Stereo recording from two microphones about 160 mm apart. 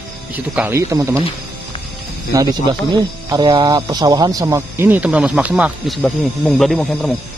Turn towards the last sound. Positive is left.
turn(degrees=5)  # may be behind; listen again after turning